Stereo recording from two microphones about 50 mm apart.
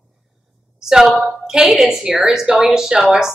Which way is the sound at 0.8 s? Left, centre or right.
Centre.